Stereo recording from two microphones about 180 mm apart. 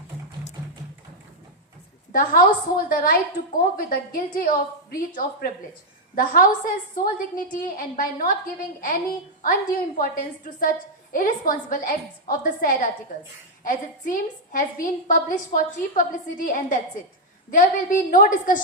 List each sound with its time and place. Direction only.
2.1 s a woman's voice: 50° left (ahead or behind)